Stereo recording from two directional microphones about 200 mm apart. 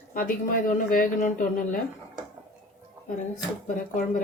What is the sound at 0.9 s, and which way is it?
Speech, 45° left (ahead or behind).